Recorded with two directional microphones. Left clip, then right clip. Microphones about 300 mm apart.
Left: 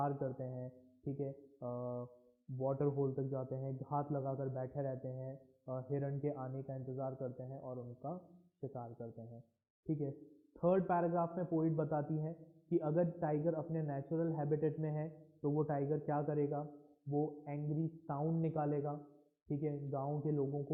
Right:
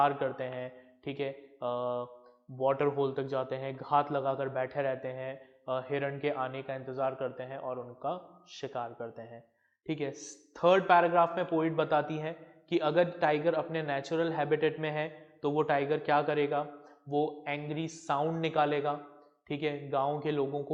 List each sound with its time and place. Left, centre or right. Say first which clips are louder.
0.0 s a man's voice: right 11 dB; centre
17.1 s speech: right 8 dB; right
17.4 s a man's voice: right 8 dB; centre